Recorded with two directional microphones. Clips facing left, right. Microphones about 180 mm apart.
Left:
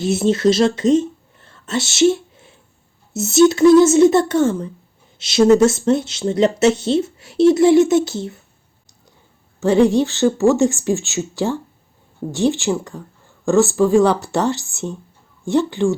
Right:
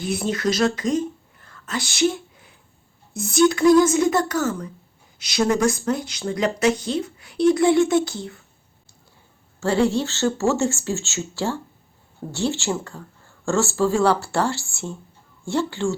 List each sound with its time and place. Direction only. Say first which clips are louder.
0.0 s speech: left 8 dB; 25° left (ahead or behind)
9.6 s speech: left 6 dB; 15° left (ahead or behind)